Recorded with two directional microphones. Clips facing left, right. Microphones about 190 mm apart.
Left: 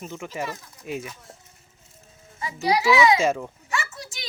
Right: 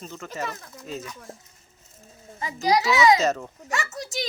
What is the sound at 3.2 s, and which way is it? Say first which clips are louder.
Speech: left 1 dB; 10° left (ahead or behind).